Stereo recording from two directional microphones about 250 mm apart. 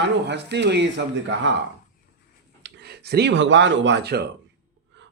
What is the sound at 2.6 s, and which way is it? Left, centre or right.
Speech, right.